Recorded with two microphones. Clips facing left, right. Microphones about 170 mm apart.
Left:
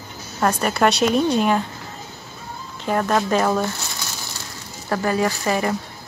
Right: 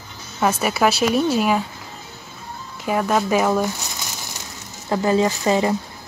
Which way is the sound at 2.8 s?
5° right (ahead or behind).